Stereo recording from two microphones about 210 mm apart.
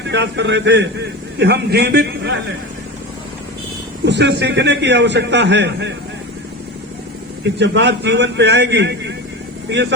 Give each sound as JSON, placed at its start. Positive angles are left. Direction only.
{"t": 0.1, "sound": "a man's voice", "side_deg": -55}
{"t": 4.0, "sound": "a man's voice", "side_deg": -55}
{"t": 7.6, "sound": "a man's voice", "side_deg": -55}